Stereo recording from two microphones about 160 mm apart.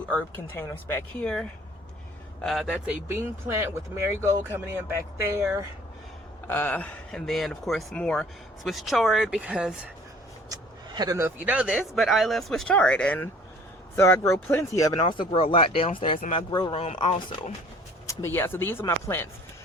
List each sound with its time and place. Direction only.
0.1 s speech: 10° left (ahead or behind)
2.4 s speech: centre (ahead or behind); by 5.5 s 15° right (ahead or behind)
6.5 s speech: 10° left (ahead or behind); by 9.8 s 5° right (ahead or behind)
10.5 s a sound: 25° right (ahead or behind)
11.3 s speech: 10° right (ahead or behind); by 14.9 s 20° left (ahead or behind)
15.0 s speech: 30° left (ahead or behind)
18.1 s speech: 15° left (ahead or behind)